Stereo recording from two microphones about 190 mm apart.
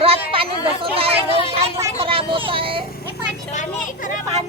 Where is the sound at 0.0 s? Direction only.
30° right (ahead or behind).